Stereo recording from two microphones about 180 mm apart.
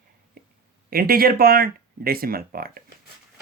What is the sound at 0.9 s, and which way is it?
Speech, 55° right (ahead or behind).